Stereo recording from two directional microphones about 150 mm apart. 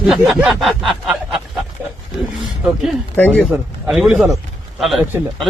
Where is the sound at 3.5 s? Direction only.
10° right (ahead or behind).